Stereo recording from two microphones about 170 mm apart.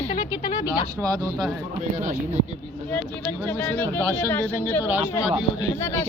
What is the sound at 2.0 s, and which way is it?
Speech, 45° right (ahead or behind).